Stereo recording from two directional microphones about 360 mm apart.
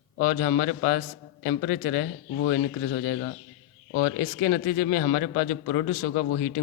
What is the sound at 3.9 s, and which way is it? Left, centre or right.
A man's voice, left.